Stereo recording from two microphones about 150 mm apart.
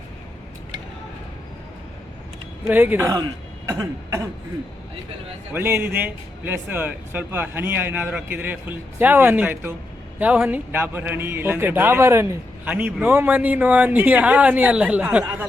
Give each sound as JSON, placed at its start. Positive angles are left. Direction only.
{"t": 2.6, "sound": "a man's voice", "side_deg": -10}
{"t": 3.7, "sound": "throat clearing", "side_deg": -20}
{"t": 5.5, "sound": "a man's voice", "side_deg": -15}